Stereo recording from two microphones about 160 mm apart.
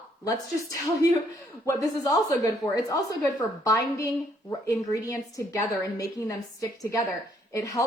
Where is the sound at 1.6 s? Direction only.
20° left (ahead or behind).